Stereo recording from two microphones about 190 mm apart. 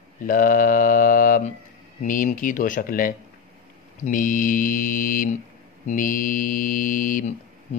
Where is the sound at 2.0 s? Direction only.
45° left (ahead or behind).